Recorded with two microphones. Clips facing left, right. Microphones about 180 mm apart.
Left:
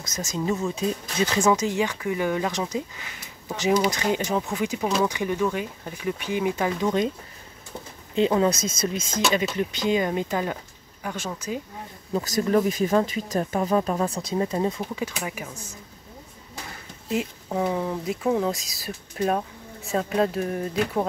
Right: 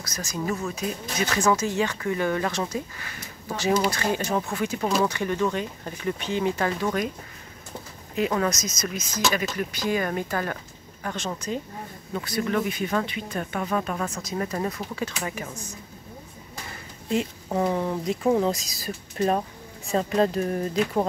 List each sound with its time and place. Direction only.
0.0 s speech: 20° left (ahead or behind)
8.5 s speech: 30° left (ahead or behind); by 11.6 s 5° left (ahead or behind)
12.1 s speech: 35° left (ahead or behind)
15.0 s speech: 10° left (ahead or behind)
17.5 s speech: centre (ahead or behind)